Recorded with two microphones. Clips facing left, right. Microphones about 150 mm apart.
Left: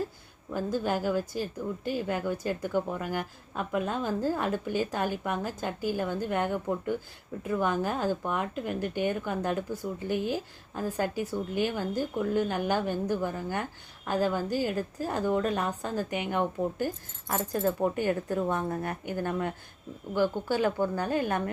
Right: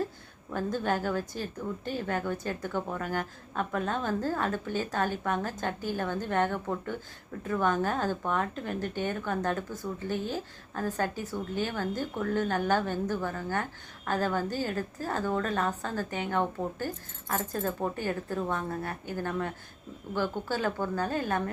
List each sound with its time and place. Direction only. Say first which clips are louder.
0.5 s a woman's voice: left 1 dB; 10° left (ahead or behind)